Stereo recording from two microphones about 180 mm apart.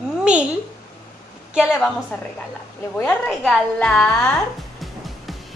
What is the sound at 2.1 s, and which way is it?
A woman's voice, 5° left (ahead or behind).